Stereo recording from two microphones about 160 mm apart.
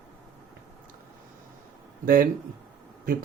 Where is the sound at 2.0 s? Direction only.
60° right (ahead or behind).